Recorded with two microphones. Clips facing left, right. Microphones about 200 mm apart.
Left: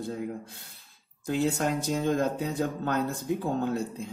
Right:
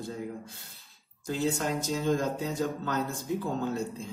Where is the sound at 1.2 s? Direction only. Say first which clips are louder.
Left 3 dB; 60° left (ahead or behind).